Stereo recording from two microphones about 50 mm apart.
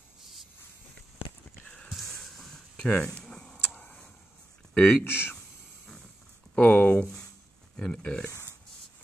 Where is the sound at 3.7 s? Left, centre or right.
Left.